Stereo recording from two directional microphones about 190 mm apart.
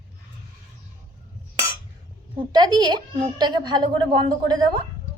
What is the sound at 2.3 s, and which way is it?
Speech, 20° right (ahead or behind).